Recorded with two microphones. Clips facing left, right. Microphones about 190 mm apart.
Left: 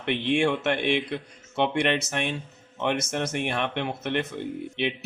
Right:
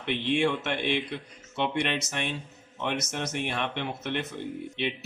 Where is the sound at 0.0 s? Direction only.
55° left (ahead or behind).